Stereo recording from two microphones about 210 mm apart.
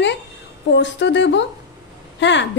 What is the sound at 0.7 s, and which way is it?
Speech, 55° left (ahead or behind).